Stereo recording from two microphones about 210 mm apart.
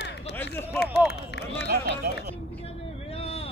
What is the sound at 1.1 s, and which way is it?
Run, 50° left (ahead or behind).